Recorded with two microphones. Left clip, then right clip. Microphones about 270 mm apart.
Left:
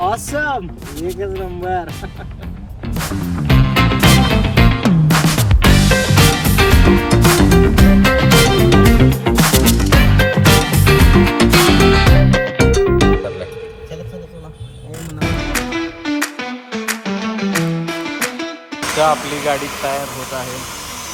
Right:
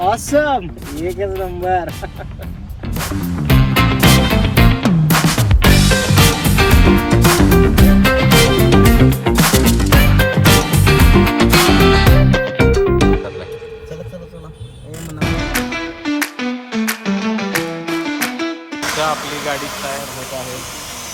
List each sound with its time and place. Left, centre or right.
2.8 s music: centre
15.2 s music: centre
20.0 s a sound: centre